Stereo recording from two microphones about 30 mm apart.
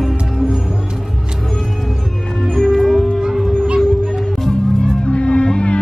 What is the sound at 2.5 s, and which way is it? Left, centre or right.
Music, centre.